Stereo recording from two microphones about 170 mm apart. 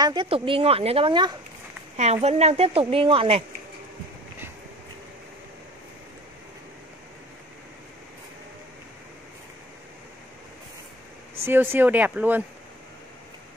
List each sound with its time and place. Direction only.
0.0 s speech: 25° right (ahead or behind)
11.4 s speech: 15° right (ahead or behind)